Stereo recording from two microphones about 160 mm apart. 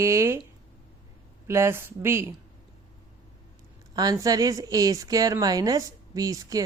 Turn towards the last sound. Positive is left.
turn(degrees=-20)  # may be behind; listen again after turning